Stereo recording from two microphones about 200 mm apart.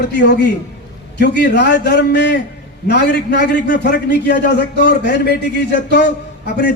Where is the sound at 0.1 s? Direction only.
60° left (ahead or behind).